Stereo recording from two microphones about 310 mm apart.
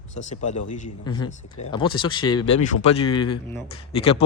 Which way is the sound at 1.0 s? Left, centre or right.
Centre.